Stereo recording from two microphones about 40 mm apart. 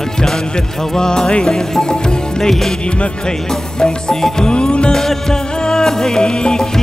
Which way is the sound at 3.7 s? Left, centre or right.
Centre.